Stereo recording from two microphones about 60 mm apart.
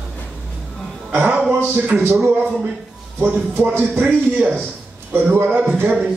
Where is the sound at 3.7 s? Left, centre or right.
Right.